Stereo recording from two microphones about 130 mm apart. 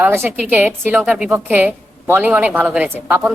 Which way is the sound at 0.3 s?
15° right (ahead or behind).